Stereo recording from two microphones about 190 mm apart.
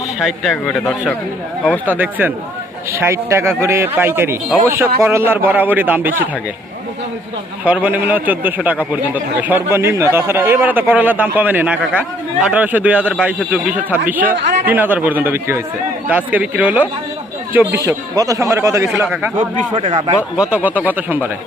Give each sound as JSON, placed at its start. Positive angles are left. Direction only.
{"t": 0.2, "sound": "speech", "side_deg": 0}
{"t": 1.9, "sound": "speech", "side_deg": -10}
{"t": 7.6, "sound": "speech", "side_deg": -10}
{"t": 19.0, "sound": "speech", "side_deg": 0}
{"t": 20.3, "sound": "speech", "side_deg": -5}